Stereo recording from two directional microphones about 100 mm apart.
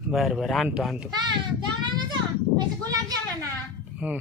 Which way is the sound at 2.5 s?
40° right (ahead or behind).